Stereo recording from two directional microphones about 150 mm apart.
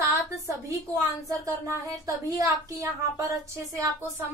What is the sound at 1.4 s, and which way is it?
A woman's voice, 25° right (ahead or behind).